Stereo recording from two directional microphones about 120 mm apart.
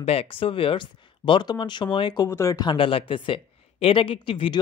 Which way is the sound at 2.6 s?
45° left (ahead or behind).